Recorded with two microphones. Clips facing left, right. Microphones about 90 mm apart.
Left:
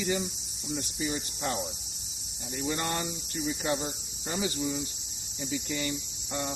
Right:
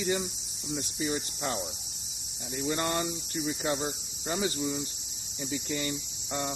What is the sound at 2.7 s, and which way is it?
Speech, 35° right (ahead or behind).